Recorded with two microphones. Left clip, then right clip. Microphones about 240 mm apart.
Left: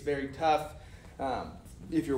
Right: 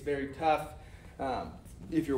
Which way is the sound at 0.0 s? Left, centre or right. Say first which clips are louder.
Left 1 dB; centre.